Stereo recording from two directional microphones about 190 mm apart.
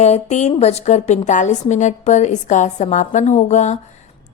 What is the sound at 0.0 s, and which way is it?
A woman's voice, 35° left (ahead or behind).